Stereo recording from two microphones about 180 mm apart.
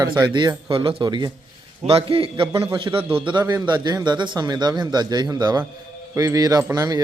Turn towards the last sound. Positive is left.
turn(degrees=-20)  # may be behind; listen again after turning